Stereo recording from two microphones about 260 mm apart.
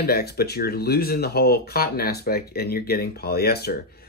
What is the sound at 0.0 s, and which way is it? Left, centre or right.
Speech, left.